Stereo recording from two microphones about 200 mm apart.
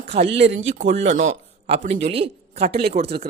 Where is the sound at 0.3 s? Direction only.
60° right (ahead or behind).